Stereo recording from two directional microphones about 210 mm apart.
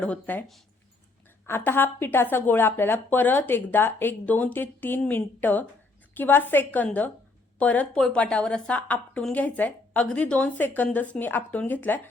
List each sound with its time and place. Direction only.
0.0 s a woman's voice: 5° left (ahead or behind)